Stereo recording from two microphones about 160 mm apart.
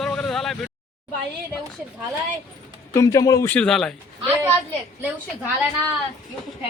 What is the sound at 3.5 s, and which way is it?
Speech, 5° left (ahead or behind).